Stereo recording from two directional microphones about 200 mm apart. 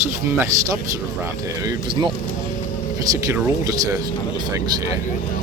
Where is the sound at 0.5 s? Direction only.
15° right (ahead or behind).